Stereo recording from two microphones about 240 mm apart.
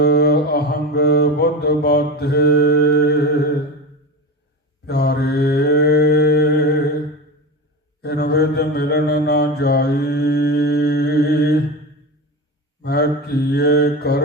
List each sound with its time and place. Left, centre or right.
0.0 s mantra: left
4.9 s mantra: left
8.0 s mantra: left
12.8 s mantra: left